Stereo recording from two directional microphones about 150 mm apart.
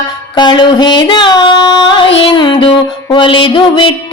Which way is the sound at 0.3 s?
30° left (ahead or behind).